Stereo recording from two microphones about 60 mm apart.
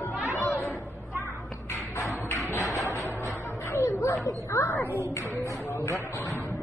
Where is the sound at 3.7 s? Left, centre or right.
Left.